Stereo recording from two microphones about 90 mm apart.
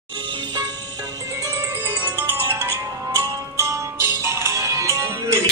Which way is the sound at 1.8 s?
20° right (ahead or behind).